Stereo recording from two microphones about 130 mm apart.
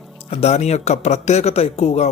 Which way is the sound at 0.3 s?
55° left (ahead or behind).